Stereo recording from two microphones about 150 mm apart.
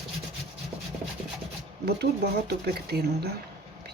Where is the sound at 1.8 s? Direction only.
90° right.